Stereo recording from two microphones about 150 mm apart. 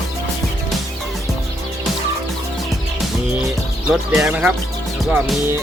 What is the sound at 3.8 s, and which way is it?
Speech, 5° right (ahead or behind).